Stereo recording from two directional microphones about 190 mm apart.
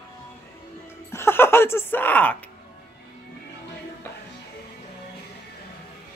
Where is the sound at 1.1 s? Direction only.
10° left (ahead or behind).